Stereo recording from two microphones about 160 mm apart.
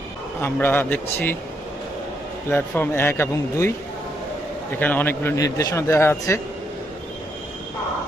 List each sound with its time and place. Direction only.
0.4 s a man's voice: 15° left (ahead or behind)
2.5 s a man's voice: 15° left (ahead or behind)
4.8 s a man's voice: 10° left (ahead or behind)